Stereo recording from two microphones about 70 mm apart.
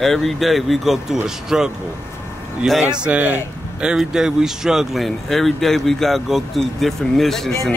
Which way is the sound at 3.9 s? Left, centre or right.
Centre.